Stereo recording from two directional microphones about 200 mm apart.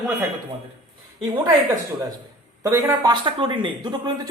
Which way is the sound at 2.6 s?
15° right (ahead or behind).